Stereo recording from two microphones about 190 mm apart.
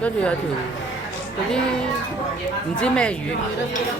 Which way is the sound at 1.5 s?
5° left (ahead or behind).